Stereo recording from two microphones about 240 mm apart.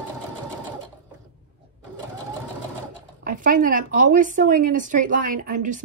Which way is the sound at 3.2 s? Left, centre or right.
Right.